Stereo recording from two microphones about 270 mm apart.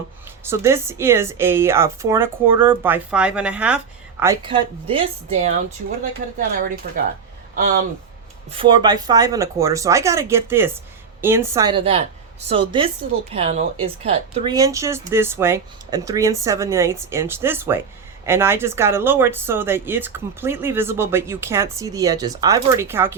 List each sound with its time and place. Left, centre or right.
0.4 s speech: centre
6.8 s speech: right
8.4 s speech: centre